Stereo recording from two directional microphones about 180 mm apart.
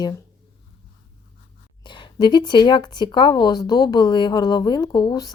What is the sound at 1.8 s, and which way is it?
Speech, 25° left (ahead or behind).